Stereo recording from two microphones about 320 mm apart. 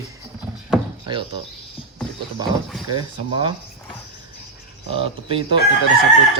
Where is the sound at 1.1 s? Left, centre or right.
Centre.